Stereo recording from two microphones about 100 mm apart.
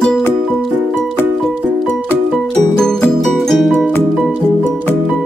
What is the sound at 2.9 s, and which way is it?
Music, 5° left (ahead or behind).